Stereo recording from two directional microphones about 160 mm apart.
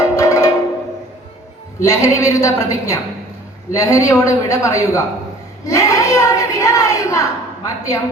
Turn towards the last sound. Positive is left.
turn(degrees=20)  # may be behind; listen again after turning